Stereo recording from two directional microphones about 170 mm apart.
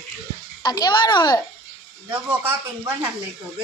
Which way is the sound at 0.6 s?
25° left (ahead or behind).